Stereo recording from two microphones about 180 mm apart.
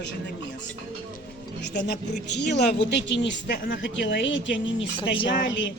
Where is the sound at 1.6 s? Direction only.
70° left (ahead or behind); by 3.8 s 55° left (ahead or behind).